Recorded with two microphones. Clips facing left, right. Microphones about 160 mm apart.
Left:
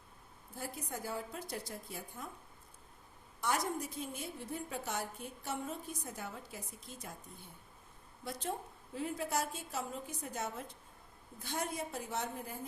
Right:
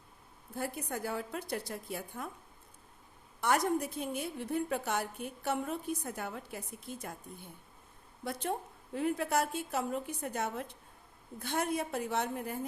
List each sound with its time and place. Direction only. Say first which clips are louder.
0.5 s a woman's voice: right 6 dB; 65° right (ahead or behind)
3.4 s a woman's voice: right 6 dB; 60° right (ahead or behind)
8.2 s a woman's voice: right 4 dB; 60° right (ahead or behind)